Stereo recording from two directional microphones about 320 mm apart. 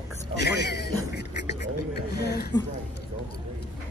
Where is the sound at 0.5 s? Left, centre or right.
Left.